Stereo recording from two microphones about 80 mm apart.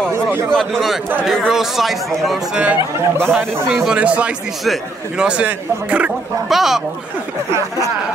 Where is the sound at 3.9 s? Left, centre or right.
Centre.